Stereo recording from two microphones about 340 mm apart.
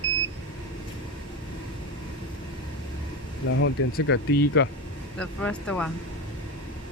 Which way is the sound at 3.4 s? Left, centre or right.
Left.